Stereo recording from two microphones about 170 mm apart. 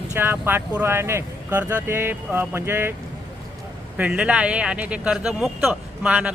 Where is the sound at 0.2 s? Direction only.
10° right (ahead or behind).